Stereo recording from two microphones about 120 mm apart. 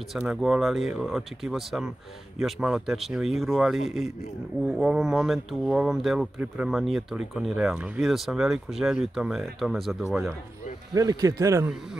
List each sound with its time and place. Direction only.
0.1 s speech: 5° right (ahead or behind)
11.0 s speech: 30° right (ahead or behind)